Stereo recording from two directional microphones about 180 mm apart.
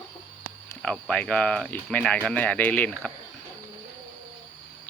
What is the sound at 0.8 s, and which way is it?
Speech, 5° left (ahead or behind).